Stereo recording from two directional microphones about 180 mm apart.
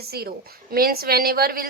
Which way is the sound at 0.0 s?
60° right (ahead or behind).